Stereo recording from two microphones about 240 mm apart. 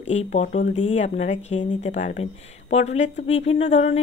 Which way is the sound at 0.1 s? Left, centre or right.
Left.